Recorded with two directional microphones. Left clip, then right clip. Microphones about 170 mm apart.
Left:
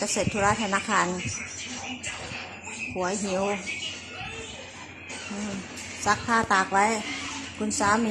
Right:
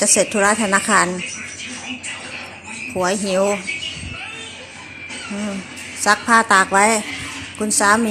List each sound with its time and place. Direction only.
0.0 s a woman's voice: 25° right (ahead or behind)
2.9 s a woman's voice: 20° right (ahead or behind)
6.0 s a woman's voice: 20° right (ahead or behind)